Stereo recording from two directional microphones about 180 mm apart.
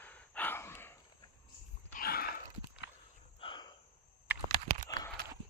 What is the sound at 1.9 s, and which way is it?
Dog, 55° left (ahead or behind).